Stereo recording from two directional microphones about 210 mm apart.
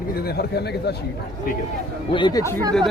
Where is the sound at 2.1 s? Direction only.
20° left (ahead or behind).